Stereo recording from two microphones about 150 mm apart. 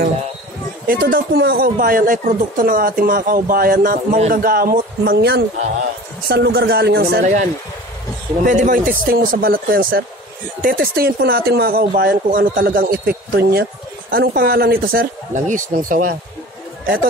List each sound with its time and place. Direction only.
0.8 s speech: 75° right (ahead or behind)
8.5 s speech: 60° right (ahead or behind); by 13.7 s 90° right
14.1 s speech: 75° right (ahead or behind)